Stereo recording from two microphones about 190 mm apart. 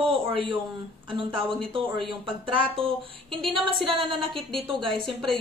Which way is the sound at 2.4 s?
30° right (ahead or behind).